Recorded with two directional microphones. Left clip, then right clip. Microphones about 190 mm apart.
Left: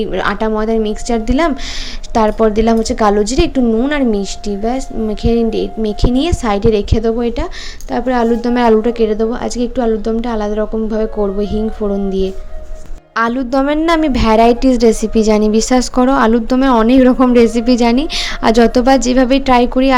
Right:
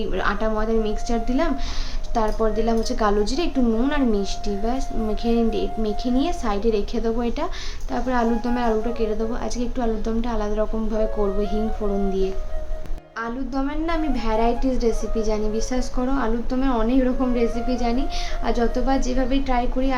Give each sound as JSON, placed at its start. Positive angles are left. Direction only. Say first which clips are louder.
{"t": 0.0, "sound": "a woman's voice", "louder": "left 8 dB", "side_deg": 40}
{"t": 13.1, "sound": "a woman's voice", "louder": "left 14 dB", "side_deg": 50}